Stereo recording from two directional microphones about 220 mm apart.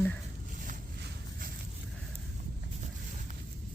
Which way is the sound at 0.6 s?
40° right (ahead or behind).